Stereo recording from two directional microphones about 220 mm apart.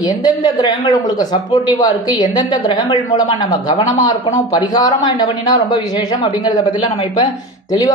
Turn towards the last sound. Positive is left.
turn(degrees=20)  # may be behind; listen again after turning